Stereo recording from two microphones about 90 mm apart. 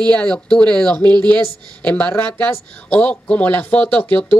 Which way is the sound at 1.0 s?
55° right (ahead or behind).